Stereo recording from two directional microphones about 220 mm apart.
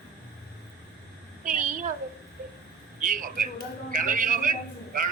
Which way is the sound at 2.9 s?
35° right (ahead or behind).